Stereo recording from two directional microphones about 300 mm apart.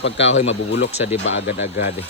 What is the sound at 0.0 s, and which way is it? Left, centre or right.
Speech, left.